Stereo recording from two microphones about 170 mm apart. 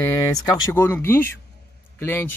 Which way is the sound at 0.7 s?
10° left (ahead or behind).